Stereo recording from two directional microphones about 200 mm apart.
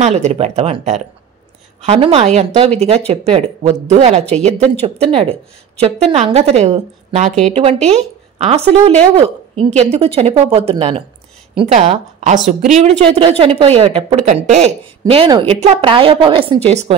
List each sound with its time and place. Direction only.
0.0 s a woman's voice: 35° right (ahead or behind)